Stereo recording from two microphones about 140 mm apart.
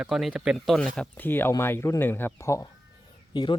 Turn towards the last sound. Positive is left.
turn(degrees=35)  # may be behind; listen again after turning